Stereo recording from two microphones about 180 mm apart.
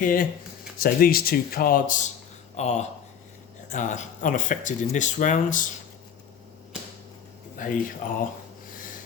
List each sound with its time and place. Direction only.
0.0 s speech: 50° left (ahead or behind)
2.6 s speech: 40° left (ahead or behind)
7.5 s a sound: 45° left (ahead or behind)